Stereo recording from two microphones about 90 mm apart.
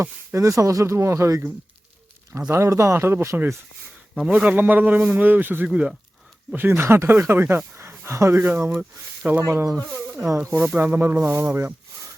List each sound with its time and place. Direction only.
0.3 s speech: 35° right (ahead or behind)
2.5 s speech: 35° right (ahead or behind)
4.1 s a man's voice: 10° right (ahead or behind)
6.5 s speech: 25° right (ahead or behind)